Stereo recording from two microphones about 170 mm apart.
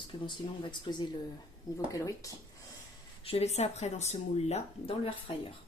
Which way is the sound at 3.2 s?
40° left (ahead or behind).